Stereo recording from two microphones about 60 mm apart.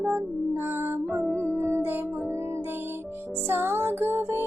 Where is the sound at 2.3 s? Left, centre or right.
Right.